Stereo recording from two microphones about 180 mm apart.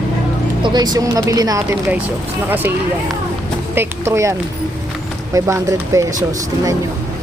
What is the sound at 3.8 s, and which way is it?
Speech, 15° right (ahead or behind).